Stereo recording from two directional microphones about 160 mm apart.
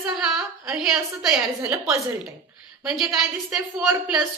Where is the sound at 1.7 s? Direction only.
20° right (ahead or behind).